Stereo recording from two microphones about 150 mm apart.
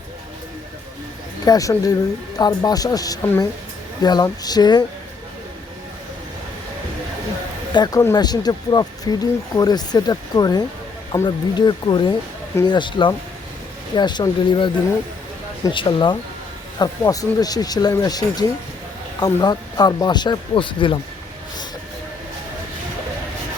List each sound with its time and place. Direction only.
1.5 s speech: 25° left (ahead or behind)
7.7 s speech: 25° left (ahead or behind)
11.6 s speech: 30° left (ahead or behind)